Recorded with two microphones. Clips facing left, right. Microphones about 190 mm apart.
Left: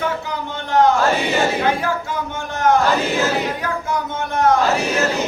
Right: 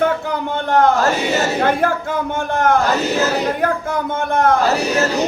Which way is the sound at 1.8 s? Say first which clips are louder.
Right 4 dB; 55° right (ahead or behind).